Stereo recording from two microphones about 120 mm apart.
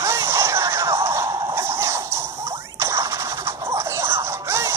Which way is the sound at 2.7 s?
25° right (ahead or behind).